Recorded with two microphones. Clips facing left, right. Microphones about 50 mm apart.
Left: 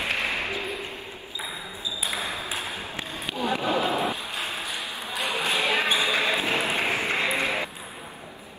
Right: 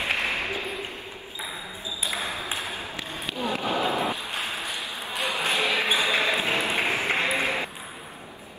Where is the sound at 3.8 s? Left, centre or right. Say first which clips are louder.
Even; right.